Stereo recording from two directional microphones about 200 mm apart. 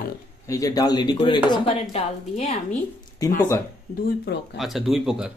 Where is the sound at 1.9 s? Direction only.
35° left (ahead or behind).